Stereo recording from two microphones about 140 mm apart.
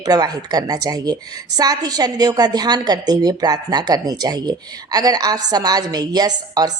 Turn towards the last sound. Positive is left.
turn(degrees=-30)  # may be behind; listen again after turning